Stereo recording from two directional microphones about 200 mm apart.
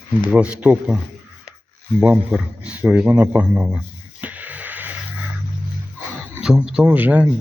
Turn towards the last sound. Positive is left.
turn(degrees=-10)  # may be behind; listen again after turning